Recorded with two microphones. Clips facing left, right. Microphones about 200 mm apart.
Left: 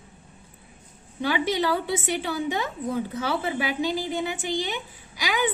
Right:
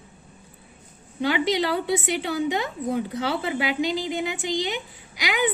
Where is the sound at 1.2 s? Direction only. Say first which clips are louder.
Right 2 dB; 15° right (ahead or behind).